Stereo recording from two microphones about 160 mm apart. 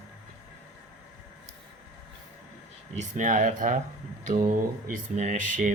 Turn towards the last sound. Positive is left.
turn(degrees=-50)  # may be behind; listen again after turning